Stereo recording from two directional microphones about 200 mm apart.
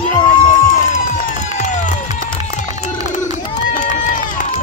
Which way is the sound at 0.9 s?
40° left (ahead or behind).